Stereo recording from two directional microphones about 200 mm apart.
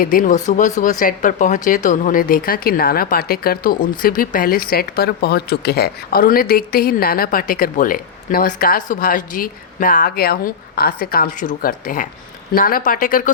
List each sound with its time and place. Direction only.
0.0 s speech: 45° left (ahead or behind)